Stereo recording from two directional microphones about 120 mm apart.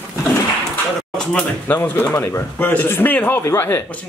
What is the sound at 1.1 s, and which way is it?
Speech, 10° left (ahead or behind).